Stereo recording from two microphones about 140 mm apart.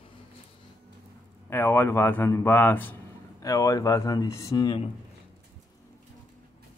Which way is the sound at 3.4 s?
25° left (ahead or behind).